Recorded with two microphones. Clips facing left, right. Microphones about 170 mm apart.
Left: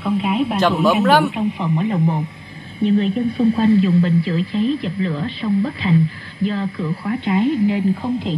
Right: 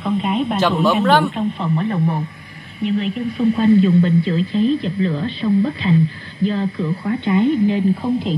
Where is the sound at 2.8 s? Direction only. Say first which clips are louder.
Left 3 dB; 35° left (ahead or behind).